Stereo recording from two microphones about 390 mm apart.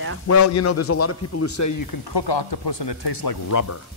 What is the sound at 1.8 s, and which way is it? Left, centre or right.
Speech, left.